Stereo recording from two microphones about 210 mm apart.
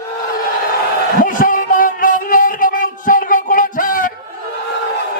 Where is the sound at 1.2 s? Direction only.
40° left (ahead or behind).